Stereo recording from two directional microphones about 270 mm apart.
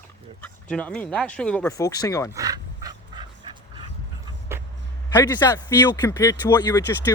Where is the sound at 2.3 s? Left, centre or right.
Centre.